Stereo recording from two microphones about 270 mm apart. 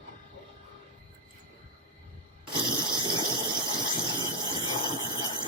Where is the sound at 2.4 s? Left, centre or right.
Centre.